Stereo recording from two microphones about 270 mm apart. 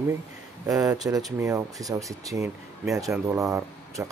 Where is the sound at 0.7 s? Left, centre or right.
Centre.